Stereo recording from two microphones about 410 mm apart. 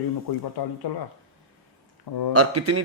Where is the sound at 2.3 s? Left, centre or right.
Right.